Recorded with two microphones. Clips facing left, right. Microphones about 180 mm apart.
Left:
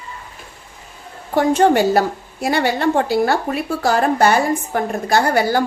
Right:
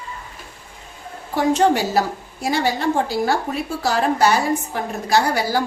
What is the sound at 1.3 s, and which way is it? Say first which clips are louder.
A woman's voice: left 3 dB; 55° left (ahead or behind).